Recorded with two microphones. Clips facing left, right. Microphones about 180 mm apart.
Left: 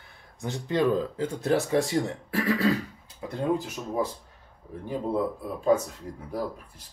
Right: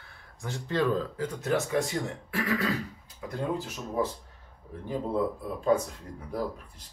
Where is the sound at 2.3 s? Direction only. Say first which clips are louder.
Left 4 dB; 30° left (ahead or behind).